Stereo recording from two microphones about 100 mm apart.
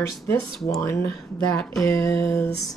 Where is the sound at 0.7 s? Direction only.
30° left (ahead or behind).